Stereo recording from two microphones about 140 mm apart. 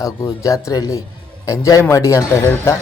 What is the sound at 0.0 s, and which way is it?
Speech, 25° left (ahead or behind).